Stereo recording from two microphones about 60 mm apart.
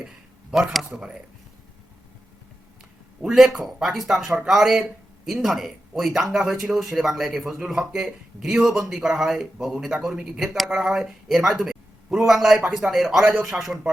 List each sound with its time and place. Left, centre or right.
0.5 s speech: centre
3.2 s a man's voice: centre